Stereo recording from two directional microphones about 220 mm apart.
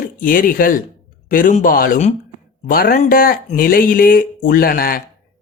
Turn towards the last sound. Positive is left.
turn(degrees=40)  # may be behind; listen again after turning